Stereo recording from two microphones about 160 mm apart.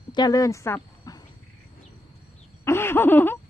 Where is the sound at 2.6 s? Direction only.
15° left (ahead or behind).